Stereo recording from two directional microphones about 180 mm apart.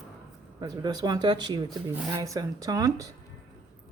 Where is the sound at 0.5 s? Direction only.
25° right (ahead or behind).